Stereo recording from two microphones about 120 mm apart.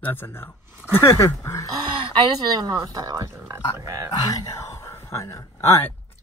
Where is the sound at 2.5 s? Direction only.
35° right (ahead or behind).